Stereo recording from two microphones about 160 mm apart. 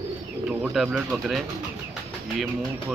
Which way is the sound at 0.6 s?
Centre (ahead or behind).